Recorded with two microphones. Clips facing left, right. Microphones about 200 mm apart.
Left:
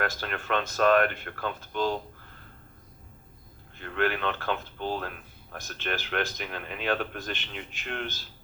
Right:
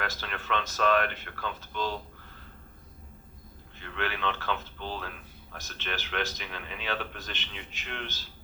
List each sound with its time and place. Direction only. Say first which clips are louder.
0.0 s speech: left 5 dB; 50° left (ahead or behind)
3.8 s speech: left 6 dB; 45° left (ahead or behind)